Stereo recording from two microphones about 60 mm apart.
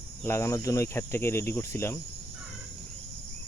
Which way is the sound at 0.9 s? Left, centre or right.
Left.